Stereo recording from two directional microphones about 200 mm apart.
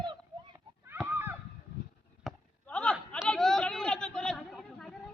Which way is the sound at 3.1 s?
5° left (ahead or behind).